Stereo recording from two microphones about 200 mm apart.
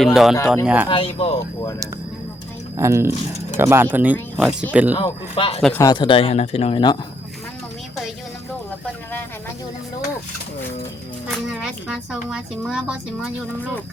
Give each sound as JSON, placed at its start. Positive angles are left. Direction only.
{"t": 0.0, "sound": "a woman's voice", "side_deg": 0}
{"t": 0.9, "sound": "speech", "side_deg": 25}
{"t": 2.7, "sound": "speech", "side_deg": -15}
{"t": 4.9, "sound": "speech", "side_deg": 30}
{"t": 11.4, "sound": "a woman's voice", "side_deg": -5}